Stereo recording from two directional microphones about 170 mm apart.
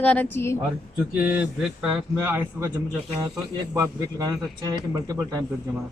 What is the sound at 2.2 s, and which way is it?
Speech, 15° right (ahead or behind).